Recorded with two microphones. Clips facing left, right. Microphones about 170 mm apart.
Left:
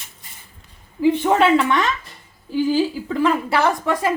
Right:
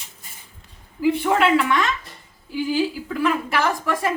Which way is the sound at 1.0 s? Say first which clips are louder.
Left 3 dB; 30° left (ahead or behind).